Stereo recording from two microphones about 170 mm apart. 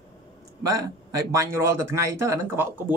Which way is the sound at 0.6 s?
20° right (ahead or behind).